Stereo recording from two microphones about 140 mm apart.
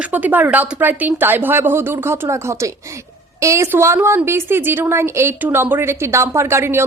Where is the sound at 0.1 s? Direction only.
10° right (ahead or behind).